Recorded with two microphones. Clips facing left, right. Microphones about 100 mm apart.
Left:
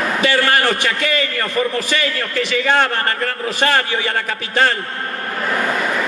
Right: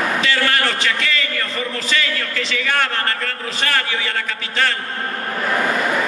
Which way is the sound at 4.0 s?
40° left (ahead or behind).